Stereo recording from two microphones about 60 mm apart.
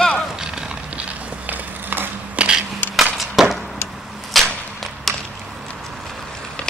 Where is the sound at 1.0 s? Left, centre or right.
Right.